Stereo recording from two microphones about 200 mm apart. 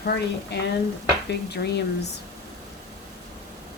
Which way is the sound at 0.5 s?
55° left (ahead or behind).